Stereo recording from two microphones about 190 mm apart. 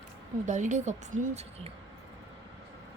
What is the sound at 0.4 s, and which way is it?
Speech, 40° right (ahead or behind).